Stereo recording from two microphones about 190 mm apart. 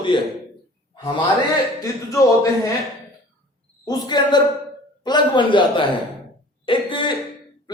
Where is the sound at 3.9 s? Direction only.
25° left (ahead or behind).